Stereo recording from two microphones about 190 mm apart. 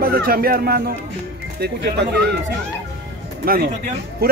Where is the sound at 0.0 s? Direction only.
50° right (ahead or behind).